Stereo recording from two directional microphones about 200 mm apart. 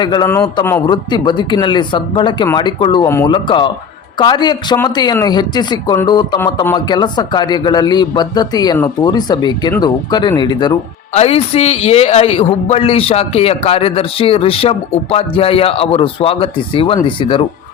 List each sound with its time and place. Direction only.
0.0 s speech: 20° left (ahead or behind)
11.1 s speech: 30° left (ahead or behind)